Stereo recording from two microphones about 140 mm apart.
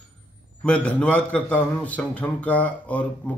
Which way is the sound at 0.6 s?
5° left (ahead or behind).